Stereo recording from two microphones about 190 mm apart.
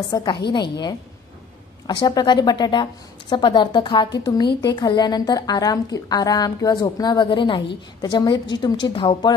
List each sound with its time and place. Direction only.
0.1 s a woman's voice: 20° left (ahead or behind)